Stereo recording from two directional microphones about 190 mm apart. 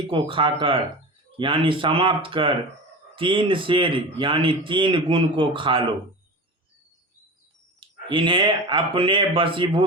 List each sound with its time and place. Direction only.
0.1 s speech: 25° right (ahead or behind)
7.8 s speech: 25° right (ahead or behind)